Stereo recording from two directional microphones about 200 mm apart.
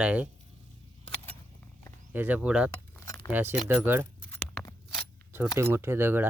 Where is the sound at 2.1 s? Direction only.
10° right (ahead or behind).